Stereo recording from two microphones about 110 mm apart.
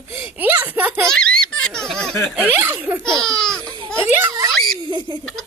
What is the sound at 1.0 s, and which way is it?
Baby laughter, 5° left (ahead or behind).